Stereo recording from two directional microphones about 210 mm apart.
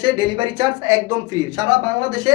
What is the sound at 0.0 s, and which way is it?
Speech, 20° right (ahead or behind).